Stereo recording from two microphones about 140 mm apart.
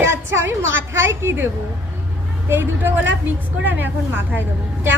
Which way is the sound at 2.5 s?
15° right (ahead or behind).